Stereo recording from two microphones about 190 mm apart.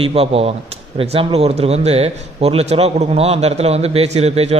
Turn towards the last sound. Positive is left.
turn(degrees=-35)  # may be behind; listen again after turning